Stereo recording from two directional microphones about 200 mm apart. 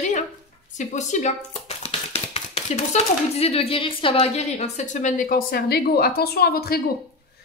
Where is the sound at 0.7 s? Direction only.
35° left (ahead or behind).